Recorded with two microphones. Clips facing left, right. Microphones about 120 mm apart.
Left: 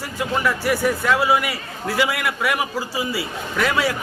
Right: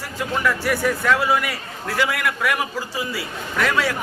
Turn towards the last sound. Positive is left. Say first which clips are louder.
# left 1 dB
turn(degrees=5)  # may be behind; listen again after turning